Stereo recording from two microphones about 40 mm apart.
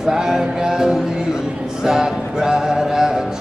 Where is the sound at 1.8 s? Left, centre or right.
Centre.